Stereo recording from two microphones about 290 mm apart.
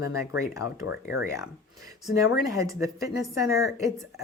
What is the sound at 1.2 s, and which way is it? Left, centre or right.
Speech, centre.